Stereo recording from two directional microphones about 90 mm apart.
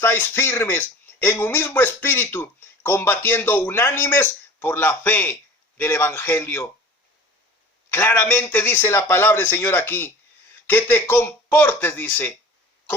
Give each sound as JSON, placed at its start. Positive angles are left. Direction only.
{"t": 0.0, "sound": "speech", "side_deg": 25}
{"t": 7.9, "sound": "speech", "side_deg": 25}